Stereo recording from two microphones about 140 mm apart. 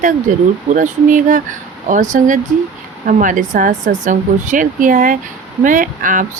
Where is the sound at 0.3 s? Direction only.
65° right (ahead or behind).